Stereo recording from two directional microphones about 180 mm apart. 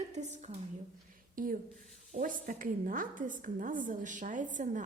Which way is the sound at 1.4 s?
50° right (ahead or behind).